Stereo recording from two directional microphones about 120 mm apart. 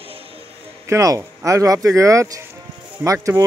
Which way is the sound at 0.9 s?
25° right (ahead or behind).